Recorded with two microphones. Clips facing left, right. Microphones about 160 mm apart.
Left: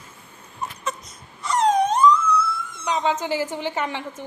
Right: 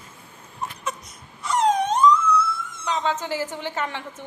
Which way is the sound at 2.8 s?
15° left (ahead or behind).